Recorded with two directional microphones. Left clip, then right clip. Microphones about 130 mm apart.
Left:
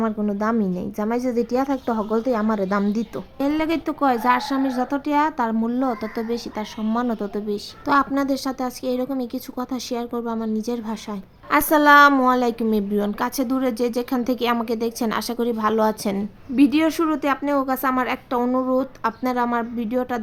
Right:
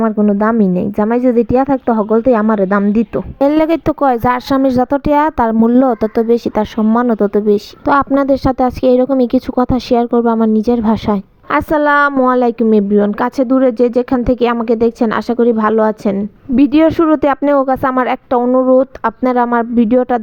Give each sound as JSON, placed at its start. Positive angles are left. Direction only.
{"t": 0.0, "sound": "speech", "side_deg": -40}
{"t": 3.4, "sound": "a woman's voice", "side_deg": -90}
{"t": 5.6, "sound": "speech", "side_deg": -60}
{"t": 6.9, "sound": "speech", "side_deg": -50}
{"t": 16.6, "sound": "a woman's voice", "side_deg": -70}
{"t": 18.4, "sound": "speech", "side_deg": -45}
{"t": 18.7, "sound": "speech", "side_deg": -65}